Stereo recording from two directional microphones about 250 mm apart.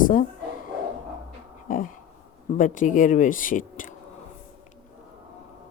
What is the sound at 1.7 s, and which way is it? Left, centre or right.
A woman's voice, left.